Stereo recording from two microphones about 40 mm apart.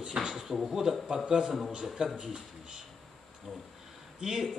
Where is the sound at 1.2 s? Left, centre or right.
Right.